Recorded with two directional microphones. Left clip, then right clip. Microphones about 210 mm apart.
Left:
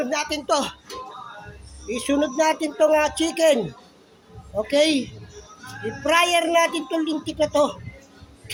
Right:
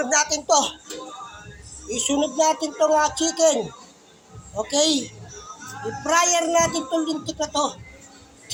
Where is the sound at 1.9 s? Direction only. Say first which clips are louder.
Left 1 dB; 30° left (ahead or behind).